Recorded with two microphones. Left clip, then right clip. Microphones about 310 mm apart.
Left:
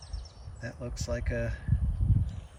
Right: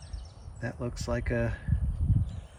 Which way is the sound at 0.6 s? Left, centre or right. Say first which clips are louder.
Right 3 dB; centre.